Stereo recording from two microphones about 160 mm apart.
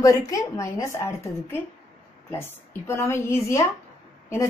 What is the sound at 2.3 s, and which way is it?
A woman's voice, 15° left (ahead or behind).